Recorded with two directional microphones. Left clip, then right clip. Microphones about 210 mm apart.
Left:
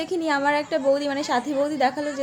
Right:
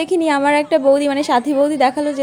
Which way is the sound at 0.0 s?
30° right (ahead or behind).